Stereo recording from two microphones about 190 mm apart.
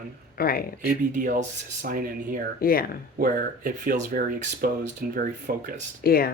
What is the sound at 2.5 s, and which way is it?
Speech, 50° left (ahead or behind).